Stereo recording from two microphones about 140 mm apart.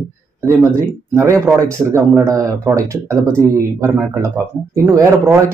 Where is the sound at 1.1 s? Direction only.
20° right (ahead or behind).